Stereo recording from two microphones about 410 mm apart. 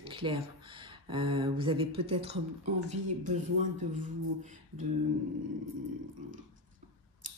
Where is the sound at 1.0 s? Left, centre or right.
Centre.